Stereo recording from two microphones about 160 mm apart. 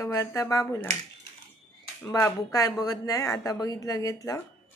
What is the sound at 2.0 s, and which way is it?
Speech, 20° left (ahead or behind).